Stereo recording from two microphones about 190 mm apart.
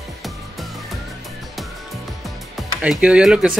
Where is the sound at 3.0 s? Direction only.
5° right (ahead or behind).